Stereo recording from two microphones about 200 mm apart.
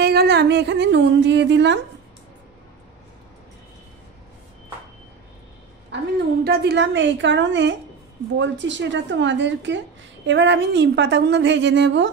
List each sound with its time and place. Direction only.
0.0 s a woman's voice: 50° right (ahead or behind)
6.4 s a woman's voice: 55° right (ahead or behind)